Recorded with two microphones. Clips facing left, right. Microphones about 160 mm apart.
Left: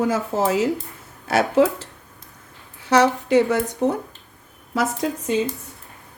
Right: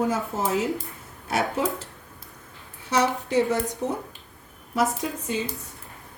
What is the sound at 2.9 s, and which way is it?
A woman's voice, 80° left.